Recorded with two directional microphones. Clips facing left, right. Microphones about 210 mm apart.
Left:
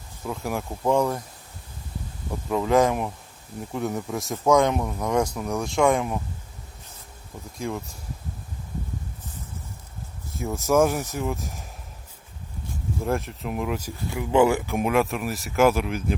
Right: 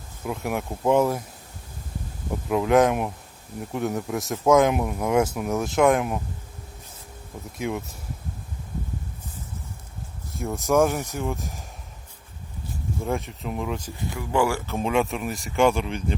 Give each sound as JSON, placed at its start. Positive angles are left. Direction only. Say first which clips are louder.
{"t": 0.3, "sound": "speech", "louder": "right 1 dB", "side_deg": -5}
{"t": 2.5, "sound": "speech", "louder": "right 1 dB", "side_deg": -5}
{"t": 7.6, "sound": "speech", "louder": "right 2 dB", "side_deg": -5}
{"t": 10.3, "sound": "speech", "louder": "even", "side_deg": 0}
{"t": 13.1, "sound": "speech", "louder": "left 2 dB", "side_deg": 0}
{"t": 14.2, "sound": "speech", "louder": "left 4 dB", "side_deg": 20}
{"t": 14.9, "sound": "speech", "louder": "left 1 dB", "side_deg": 0}